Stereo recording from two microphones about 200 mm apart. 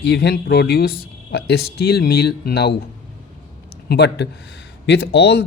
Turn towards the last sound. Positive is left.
turn(degrees=55)  # may be behind; listen again after turning